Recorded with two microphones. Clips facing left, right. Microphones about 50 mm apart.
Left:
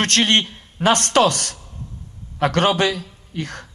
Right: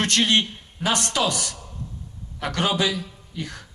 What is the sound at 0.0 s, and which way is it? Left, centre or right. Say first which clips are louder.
A man's voice: left 3 dB; left.